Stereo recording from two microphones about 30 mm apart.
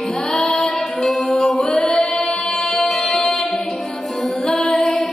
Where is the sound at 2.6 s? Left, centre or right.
Centre.